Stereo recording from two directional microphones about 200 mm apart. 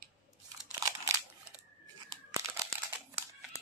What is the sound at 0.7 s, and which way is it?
Crunch, 20° right (ahead or behind).